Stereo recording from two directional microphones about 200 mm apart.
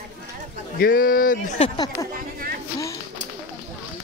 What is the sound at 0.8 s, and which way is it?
Speech, 45° left (ahead or behind).